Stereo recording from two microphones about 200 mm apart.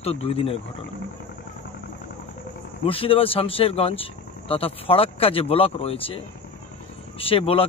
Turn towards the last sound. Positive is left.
turn(degrees=30)  # may be behind; listen again after turning